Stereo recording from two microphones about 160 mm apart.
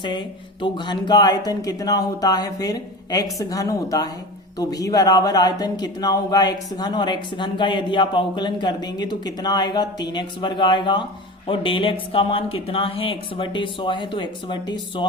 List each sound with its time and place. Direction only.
0.0 s speech: 30° left (ahead or behind)